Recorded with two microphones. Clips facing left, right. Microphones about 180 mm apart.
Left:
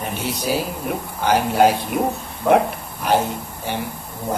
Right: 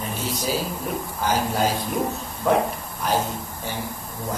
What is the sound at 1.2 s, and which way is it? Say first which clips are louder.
Speech: left 7 dB; 65° left (ahead or behind).